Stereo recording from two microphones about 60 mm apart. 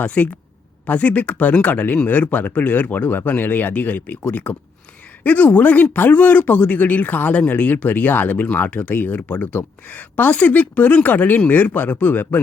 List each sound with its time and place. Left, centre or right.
0.0 s speech: left